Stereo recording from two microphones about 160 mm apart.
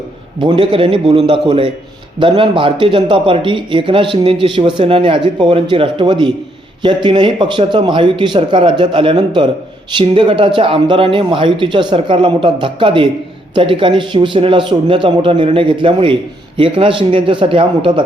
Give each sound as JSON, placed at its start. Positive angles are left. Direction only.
{"t": 0.3, "sound": "a man's voice", "side_deg": -30}